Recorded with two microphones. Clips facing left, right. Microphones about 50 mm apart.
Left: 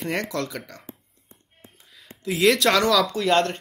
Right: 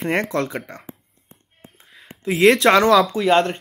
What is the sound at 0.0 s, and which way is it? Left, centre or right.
Speech, right.